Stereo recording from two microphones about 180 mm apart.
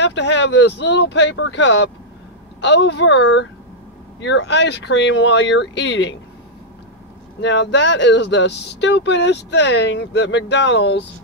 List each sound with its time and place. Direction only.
0.0 s speech: 75° left (ahead or behind)
7.4 s speech: 75° left (ahead or behind)